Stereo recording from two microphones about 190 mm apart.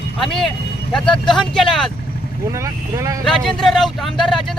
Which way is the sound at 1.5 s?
Centre (ahead or behind).